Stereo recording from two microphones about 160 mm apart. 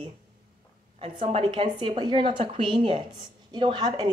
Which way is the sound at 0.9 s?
35° right (ahead or behind).